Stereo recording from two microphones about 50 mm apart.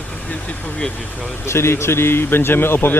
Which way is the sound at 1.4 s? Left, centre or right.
Left.